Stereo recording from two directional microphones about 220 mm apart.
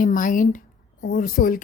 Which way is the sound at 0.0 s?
35° left (ahead or behind).